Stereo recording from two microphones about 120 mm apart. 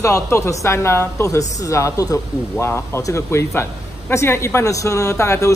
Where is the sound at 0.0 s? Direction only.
25° left (ahead or behind).